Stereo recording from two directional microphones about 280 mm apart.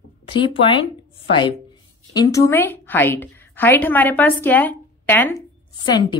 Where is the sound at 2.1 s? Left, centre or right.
Centre.